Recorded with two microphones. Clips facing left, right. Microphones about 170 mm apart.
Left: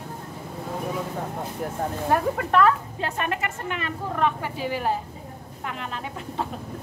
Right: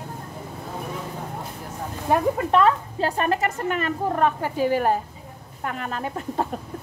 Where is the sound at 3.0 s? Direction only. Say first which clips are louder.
Right 6 dB; 35° right (ahead or behind).